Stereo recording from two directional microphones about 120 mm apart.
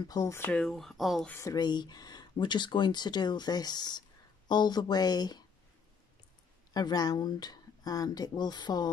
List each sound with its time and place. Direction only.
0.0 s speech: 30° left (ahead or behind)
0.4 s speech: 10° left (ahead or behind)
1.3 s speech: 30° left (ahead or behind)
6.7 s speech: 35° left (ahead or behind)